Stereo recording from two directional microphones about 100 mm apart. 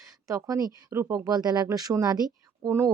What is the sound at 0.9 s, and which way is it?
Speech, 25° right (ahead or behind).